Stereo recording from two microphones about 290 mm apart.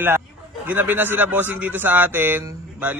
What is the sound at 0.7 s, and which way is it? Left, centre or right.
A man's voice, centre.